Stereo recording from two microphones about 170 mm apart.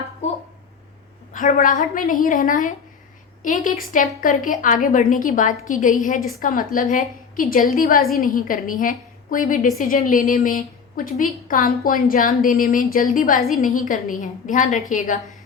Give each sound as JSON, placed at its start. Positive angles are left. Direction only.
{"t": 1.3, "sound": "a woman's voice", "side_deg": 50}